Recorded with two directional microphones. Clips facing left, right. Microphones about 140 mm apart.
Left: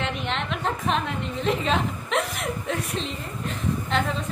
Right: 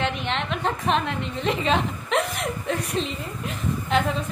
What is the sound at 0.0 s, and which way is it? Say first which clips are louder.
A woman's voice: right 2 dB; centre (ahead or behind).